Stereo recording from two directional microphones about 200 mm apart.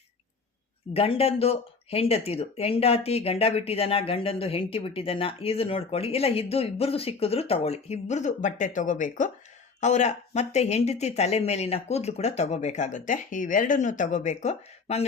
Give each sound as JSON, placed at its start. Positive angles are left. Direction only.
{"t": 0.9, "sound": "speech", "side_deg": 30}